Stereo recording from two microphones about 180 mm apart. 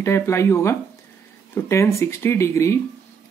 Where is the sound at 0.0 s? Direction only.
15° left (ahead or behind).